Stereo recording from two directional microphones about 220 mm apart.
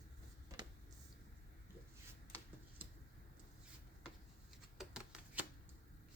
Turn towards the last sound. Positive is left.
turn(degrees=-5)  # may be behind; listen again after turning